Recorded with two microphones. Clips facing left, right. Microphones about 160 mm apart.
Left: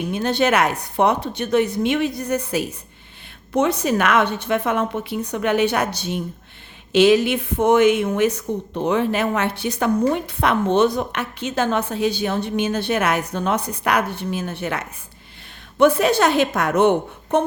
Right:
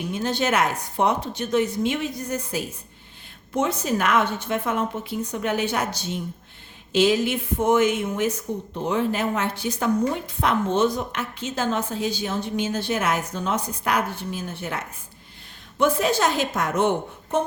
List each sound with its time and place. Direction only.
0.1 s a woman's voice: 65° left (ahead or behind)